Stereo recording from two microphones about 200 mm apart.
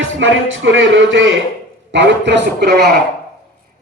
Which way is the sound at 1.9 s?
60° right (ahead or behind).